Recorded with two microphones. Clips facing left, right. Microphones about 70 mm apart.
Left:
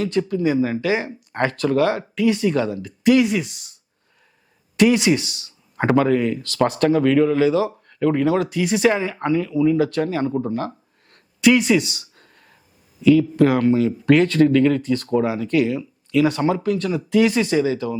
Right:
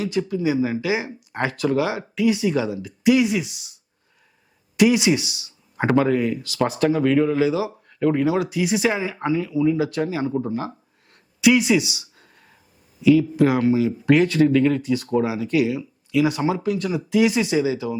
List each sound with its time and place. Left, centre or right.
0.0 s speech: centre
4.8 s speech: centre
11.1 s a sound: centre
13.0 s speech: centre